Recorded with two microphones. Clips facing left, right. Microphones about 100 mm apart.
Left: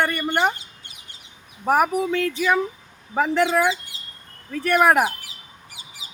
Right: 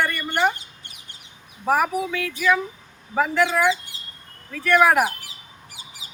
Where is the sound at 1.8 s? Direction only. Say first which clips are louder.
Left 3 dB; 50° left (ahead or behind).